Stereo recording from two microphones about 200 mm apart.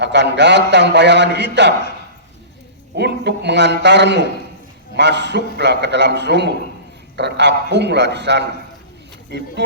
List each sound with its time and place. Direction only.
0.0 s a man's voice: 60° right (ahead or behind)
2.9 s a man's voice: 55° right (ahead or behind)